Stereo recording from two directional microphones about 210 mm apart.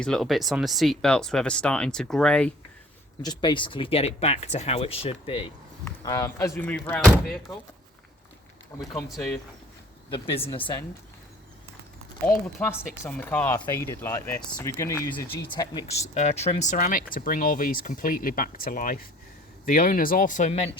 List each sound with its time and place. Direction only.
0.0 s speech: centre (ahead or behind)
3.2 s speech: 20° left (ahead or behind)
5.8 s speech: 15° left (ahead or behind)
8.8 s speech: 15° left (ahead or behind)
9.0 s speech: centre (ahead or behind)
10.1 s speech: 25° left (ahead or behind)
12.5 s speech: 10° left (ahead or behind)
15.9 s speech: 30° left (ahead or behind)